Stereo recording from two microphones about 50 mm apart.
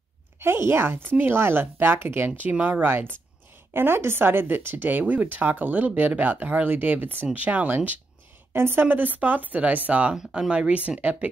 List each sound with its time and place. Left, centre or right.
0.4 s speech: right
8.5 s speech: right
8.8 s speech: right
10.1 s speech: centre
10.5 s speech: right